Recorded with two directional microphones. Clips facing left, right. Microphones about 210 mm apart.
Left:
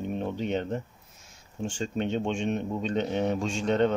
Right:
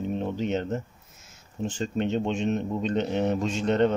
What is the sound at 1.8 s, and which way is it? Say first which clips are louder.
A man's voice: right 2 dB; 5° right (ahead or behind).